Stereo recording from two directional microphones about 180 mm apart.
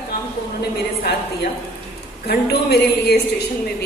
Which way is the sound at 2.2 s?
60° left (ahead or behind).